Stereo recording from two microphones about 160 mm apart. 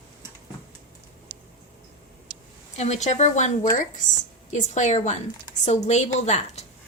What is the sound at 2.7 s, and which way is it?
A woman's voice, 45° left (ahead or behind).